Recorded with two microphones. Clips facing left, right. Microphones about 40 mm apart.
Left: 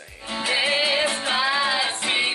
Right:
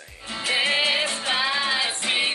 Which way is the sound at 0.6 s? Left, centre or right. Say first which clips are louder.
Even; centre.